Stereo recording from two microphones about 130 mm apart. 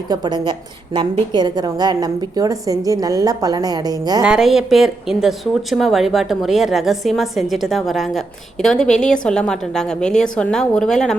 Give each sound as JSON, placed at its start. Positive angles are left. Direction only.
{"t": 0.1, "sound": "a woman's voice", "side_deg": -35}
{"t": 4.2, "sound": "a woman's voice", "side_deg": -5}